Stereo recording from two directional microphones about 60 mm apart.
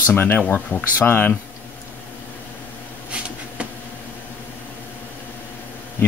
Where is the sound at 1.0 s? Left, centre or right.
Left.